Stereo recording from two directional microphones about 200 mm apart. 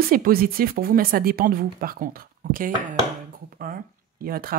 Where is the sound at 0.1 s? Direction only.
45° right (ahead or behind).